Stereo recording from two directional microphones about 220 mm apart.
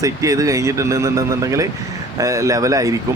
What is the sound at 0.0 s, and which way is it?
Speech, 15° right (ahead or behind).